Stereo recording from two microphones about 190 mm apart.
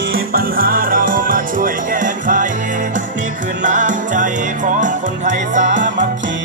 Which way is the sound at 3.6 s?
40° right (ahead or behind).